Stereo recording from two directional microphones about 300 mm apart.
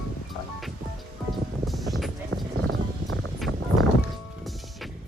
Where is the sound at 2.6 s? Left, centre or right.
Right.